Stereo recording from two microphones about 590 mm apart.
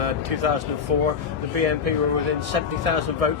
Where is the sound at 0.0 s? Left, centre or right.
Right.